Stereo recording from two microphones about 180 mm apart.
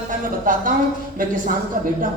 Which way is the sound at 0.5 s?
45° right (ahead or behind).